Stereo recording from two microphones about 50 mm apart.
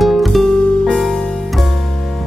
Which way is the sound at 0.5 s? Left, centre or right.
Centre.